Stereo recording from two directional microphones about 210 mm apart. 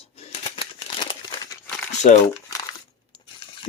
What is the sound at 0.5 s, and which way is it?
Scissors, 20° left (ahead or behind).